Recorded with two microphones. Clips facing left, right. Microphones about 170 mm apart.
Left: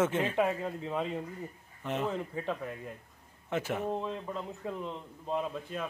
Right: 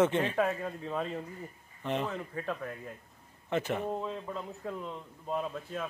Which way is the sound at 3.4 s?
10° left (ahead or behind).